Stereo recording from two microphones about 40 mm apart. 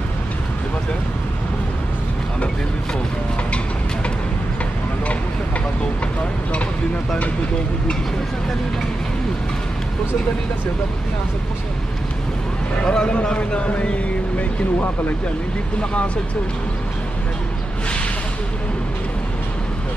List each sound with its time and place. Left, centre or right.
12.8 s a man's voice: centre